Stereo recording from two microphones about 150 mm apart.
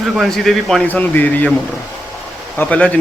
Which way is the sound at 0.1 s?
Centre (ahead or behind).